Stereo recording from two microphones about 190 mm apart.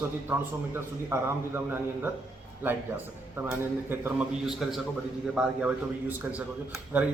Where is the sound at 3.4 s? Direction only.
10° right (ahead or behind).